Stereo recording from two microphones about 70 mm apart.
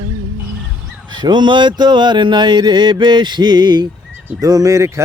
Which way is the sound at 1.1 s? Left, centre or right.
Right.